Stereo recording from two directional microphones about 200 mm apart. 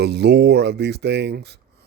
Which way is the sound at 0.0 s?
55° right (ahead or behind).